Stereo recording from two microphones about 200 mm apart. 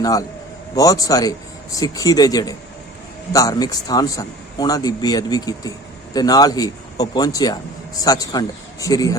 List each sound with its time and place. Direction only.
0.0 s a man's voice: 20° left (ahead or behind)